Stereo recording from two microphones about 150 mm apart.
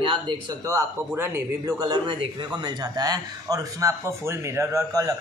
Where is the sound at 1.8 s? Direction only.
30° right (ahead or behind).